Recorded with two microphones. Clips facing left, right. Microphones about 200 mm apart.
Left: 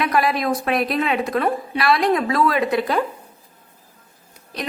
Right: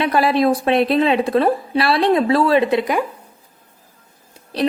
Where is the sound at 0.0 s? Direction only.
30° right (ahead or behind).